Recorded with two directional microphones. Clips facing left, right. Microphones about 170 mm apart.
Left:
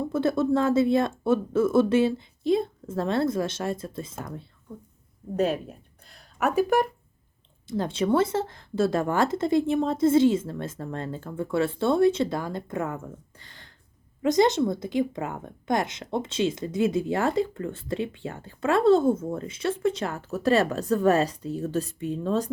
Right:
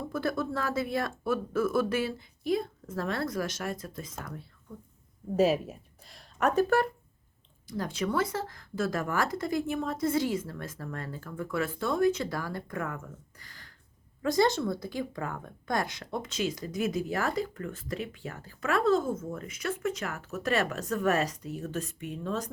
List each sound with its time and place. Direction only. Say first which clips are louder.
0.1 s a woman's voice: left 8 dB; 25° left (ahead or behind)
5.4 s speech: right 1 dB; 5° right (ahead or behind); by 6.8 s 15° left (ahead or behind)
7.7 s a woman's voice: left 7 dB; 25° left (ahead or behind)